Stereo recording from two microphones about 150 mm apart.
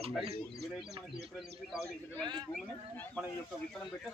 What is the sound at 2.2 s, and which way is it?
Speech, 30° right (ahead or behind).